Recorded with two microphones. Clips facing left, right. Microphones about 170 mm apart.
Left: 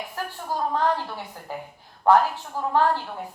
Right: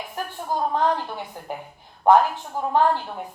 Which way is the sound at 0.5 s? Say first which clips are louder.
Right 2 dB; 15° right (ahead or behind).